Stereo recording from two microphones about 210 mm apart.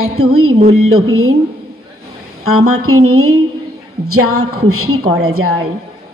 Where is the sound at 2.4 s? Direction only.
90° right.